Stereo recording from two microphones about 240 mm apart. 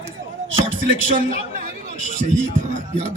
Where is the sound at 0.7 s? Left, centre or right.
Right.